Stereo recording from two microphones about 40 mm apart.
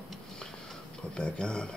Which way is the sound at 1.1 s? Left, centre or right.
Left.